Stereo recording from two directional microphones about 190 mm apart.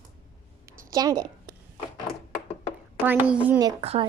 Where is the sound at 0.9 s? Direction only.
20° right (ahead or behind).